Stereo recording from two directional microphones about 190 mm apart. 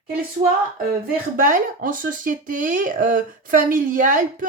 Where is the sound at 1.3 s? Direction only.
45° right (ahead or behind).